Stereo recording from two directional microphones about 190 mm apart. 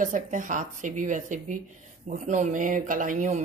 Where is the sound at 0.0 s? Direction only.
40° right (ahead or behind).